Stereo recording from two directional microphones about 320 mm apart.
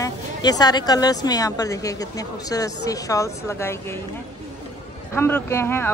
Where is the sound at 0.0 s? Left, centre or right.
Centre.